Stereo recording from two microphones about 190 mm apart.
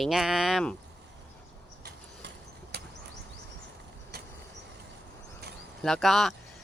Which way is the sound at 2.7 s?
60° right (ahead or behind).